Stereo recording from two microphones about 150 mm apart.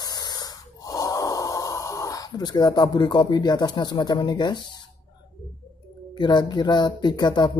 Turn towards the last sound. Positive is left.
turn(degrees=30)  # may be behind; listen again after turning